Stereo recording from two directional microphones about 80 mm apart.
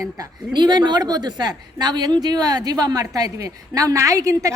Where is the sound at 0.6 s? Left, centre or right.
Right.